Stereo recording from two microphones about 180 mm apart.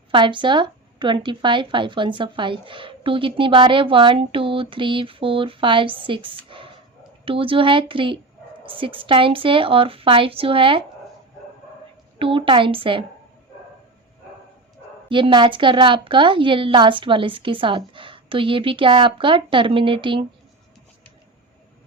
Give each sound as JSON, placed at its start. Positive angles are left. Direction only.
{"t": 0.1, "sound": "speech", "side_deg": -25}
{"t": 12.2, "sound": "speech", "side_deg": -30}
{"t": 15.1, "sound": "speech", "side_deg": -25}